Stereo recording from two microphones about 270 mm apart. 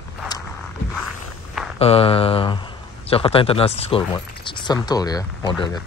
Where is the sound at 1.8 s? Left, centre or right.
Left.